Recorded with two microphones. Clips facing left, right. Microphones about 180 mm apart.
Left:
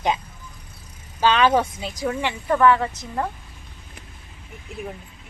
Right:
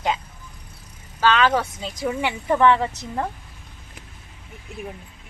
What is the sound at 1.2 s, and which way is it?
Speech, 15° left (ahead or behind).